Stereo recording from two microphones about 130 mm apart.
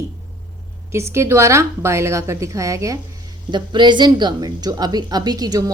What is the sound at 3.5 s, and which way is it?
A woman's voice, 35° right (ahead or behind).